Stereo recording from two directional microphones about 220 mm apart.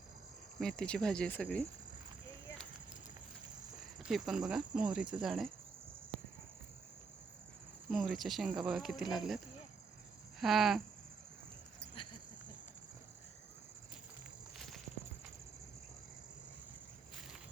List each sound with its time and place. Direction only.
0.6 s speech: 5° left (ahead or behind)
4.0 s speech: centre (ahead or behind)
7.9 s speech: centre (ahead or behind)
10.4 s speech: centre (ahead or behind)
12.0 s a sound: 25° left (ahead or behind)